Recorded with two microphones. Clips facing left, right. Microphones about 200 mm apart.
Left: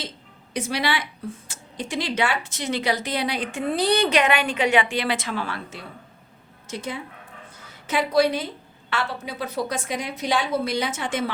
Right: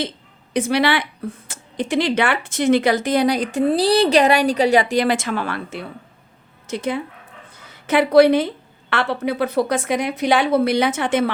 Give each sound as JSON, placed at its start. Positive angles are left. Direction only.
{"t": 0.5, "sound": "a woman's voice", "side_deg": -60}